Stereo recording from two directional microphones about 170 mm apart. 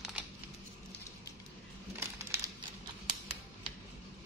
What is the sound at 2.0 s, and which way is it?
Crumpling, 15° right (ahead or behind).